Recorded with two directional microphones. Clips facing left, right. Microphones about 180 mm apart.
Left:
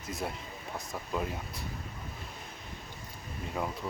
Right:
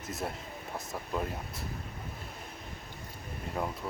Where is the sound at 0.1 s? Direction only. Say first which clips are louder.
Left 1 dB; centre (ahead or behind).